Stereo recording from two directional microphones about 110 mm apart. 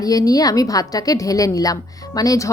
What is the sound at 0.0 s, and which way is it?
A woman's voice, 35° left (ahead or behind).